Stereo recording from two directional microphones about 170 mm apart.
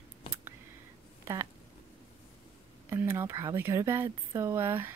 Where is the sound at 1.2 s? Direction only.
20° right (ahead or behind).